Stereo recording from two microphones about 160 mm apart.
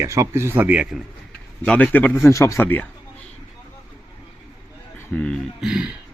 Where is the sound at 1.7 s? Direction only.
10° left (ahead or behind).